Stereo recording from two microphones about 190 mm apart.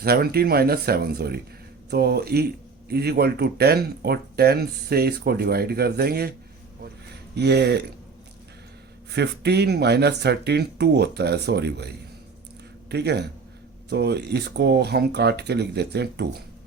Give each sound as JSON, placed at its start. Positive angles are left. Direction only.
{"t": 0.0, "sound": "speech", "side_deg": -55}
{"t": 7.3, "sound": "speech", "side_deg": -60}
{"t": 9.1, "sound": "speech", "side_deg": -60}
{"t": 12.9, "sound": "speech", "side_deg": -60}